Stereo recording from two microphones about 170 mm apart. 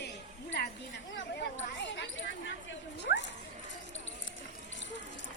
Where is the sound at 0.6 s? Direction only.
75° left (ahead or behind).